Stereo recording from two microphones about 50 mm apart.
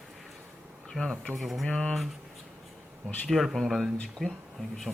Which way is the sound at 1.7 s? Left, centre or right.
Centre.